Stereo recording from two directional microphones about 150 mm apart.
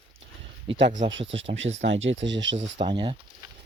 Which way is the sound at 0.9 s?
50° right (ahead or behind).